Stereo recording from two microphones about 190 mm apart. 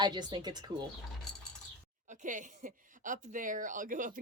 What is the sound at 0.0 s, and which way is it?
Speech, 20° right (ahead or behind).